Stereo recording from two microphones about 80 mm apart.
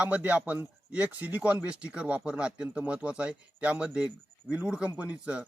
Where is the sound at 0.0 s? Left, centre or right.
Centre.